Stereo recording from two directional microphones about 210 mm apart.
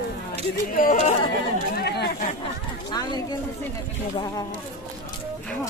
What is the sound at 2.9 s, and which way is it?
Speech, 20° left (ahead or behind).